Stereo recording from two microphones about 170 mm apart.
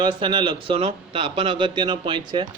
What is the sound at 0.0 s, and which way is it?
A man's voice, 30° right (ahead or behind).